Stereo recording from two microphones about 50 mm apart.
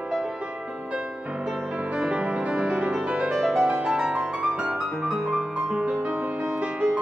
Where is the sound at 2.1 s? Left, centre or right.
Right.